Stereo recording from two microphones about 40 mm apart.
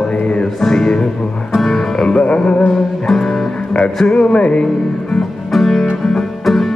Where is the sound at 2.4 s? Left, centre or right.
Left.